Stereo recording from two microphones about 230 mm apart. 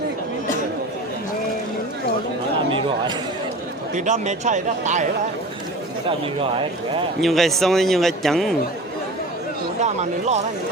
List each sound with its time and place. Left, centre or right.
2.7 s a sound: centre
3.9 s speech: right
6.1 s speech: right
7.2 s a man's voice: centre
9.8 s speech: right